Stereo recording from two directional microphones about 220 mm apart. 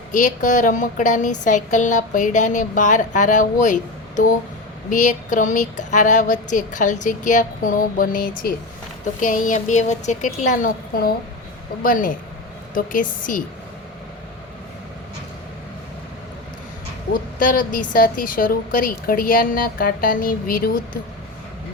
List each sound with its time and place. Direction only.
0.1 s speech: 35° left (ahead or behind)
17.4 s speech: 40° left (ahead or behind)